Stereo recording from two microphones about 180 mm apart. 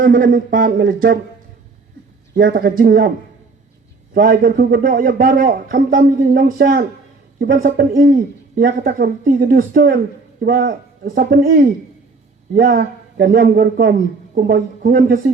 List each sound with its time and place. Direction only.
0.0 s speech: 50° right (ahead or behind)
2.3 s speech: 50° right (ahead or behind)
4.1 s speech: 55° right (ahead or behind)